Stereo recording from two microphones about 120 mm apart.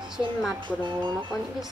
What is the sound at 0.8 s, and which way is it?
Speech, 40° right (ahead or behind).